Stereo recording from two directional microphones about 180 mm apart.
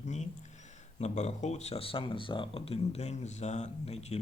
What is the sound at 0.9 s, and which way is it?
Speech, 40° left (ahead or behind).